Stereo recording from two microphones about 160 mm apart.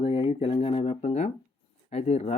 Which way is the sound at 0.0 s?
35° left (ahead or behind).